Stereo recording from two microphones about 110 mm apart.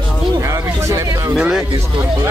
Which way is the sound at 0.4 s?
30° right (ahead or behind).